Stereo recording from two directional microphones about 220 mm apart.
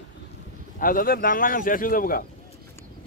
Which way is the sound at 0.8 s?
40° left (ahead or behind).